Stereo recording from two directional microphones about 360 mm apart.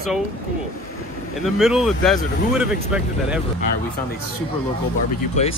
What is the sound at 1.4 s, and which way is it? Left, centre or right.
Speech, centre.